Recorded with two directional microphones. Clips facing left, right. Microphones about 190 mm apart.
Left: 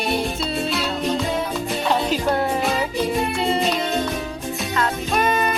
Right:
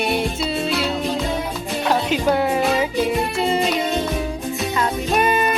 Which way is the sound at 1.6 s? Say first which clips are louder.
Right 3 dB; centre (ahead or behind).